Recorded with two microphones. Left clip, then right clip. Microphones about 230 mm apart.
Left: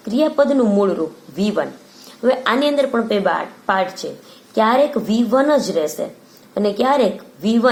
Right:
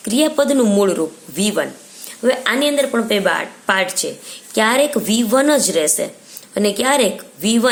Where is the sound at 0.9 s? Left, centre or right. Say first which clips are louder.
Right 2 dB; right.